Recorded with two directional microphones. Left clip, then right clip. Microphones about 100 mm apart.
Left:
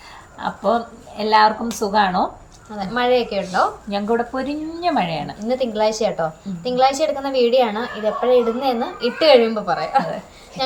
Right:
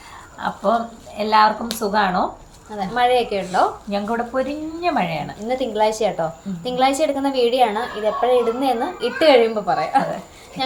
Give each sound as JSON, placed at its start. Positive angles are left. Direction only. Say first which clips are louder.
{"t": 0.3, "sound": "speech", "louder": "even", "side_deg": 15}
{"t": 2.7, "sound": "a woman's voice", "louder": "right 1 dB", "side_deg": -40}
{"t": 4.1, "sound": "speech", "louder": "left 2 dB", "side_deg": 25}
{"t": 5.5, "sound": "a woman's voice", "louder": "even", "side_deg": -35}